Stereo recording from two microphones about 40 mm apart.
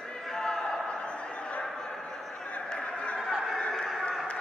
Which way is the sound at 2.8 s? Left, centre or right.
Left.